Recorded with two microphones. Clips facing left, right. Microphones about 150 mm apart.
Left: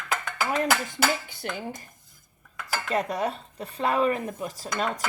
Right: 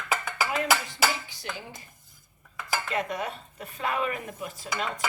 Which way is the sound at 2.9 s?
35° left (ahead or behind).